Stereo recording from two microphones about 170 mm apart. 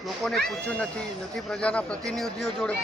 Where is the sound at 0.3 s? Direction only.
5° left (ahead or behind).